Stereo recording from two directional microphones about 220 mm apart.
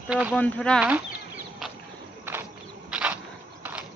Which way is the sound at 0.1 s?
5° right (ahead or behind).